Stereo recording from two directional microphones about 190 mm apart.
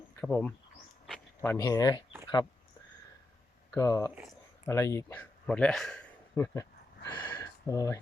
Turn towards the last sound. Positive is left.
turn(degrees=20)  # may be behind; listen again after turning